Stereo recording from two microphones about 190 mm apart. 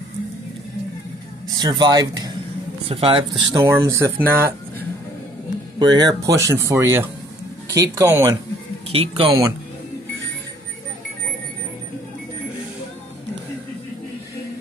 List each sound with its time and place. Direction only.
1.6 s speech: 20° right (ahead or behind)
3.6 s speech: 15° right (ahead or behind)
5.8 s speech: 20° right (ahead or behind)
8.9 s speech: 30° right (ahead or behind)